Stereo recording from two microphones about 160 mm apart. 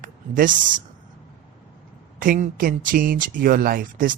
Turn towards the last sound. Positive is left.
turn(degrees=-60)  # may be behind; listen again after turning